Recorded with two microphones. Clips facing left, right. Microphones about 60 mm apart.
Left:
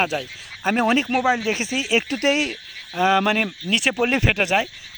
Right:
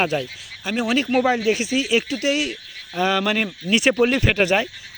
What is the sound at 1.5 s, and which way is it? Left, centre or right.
Speech, left.